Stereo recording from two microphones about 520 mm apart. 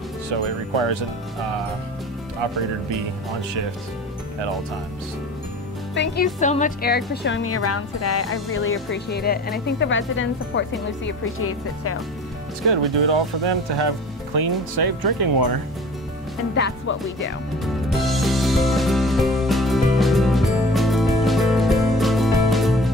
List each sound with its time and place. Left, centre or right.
0.3 s speech: right
5.9 s a woman's voice: centre
13.0 s speech: right
16.5 s speech: centre
17.6 s music: centre